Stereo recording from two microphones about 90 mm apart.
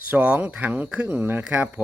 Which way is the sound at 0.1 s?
15° right (ahead or behind).